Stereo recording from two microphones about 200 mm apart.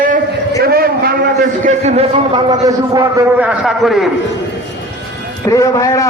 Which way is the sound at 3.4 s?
5° right (ahead or behind).